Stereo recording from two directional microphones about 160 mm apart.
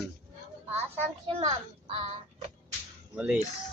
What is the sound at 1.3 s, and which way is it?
Speech, 40° right (ahead or behind).